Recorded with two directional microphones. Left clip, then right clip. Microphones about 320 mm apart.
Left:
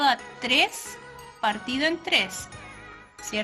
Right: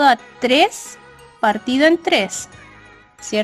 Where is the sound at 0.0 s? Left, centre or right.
Centre.